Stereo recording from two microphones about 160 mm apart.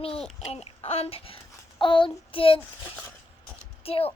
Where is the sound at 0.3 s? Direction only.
40° left (ahead or behind).